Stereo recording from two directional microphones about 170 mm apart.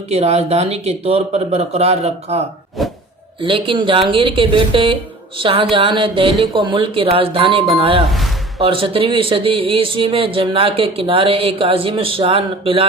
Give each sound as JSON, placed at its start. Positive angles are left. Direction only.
{"t": 0.1, "sound": "speech", "side_deg": -40}
{"t": 3.4, "sound": "speech", "side_deg": -30}
{"t": 8.1, "sound": "a sound", "side_deg": 0}
{"t": 8.6, "sound": "speech", "side_deg": -30}